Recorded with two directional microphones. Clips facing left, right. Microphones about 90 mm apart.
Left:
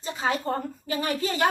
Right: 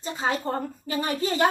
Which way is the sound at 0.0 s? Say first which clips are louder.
Even; 30° right (ahead or behind).